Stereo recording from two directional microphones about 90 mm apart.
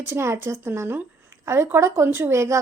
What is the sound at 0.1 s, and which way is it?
Speech, 30° right (ahead or behind).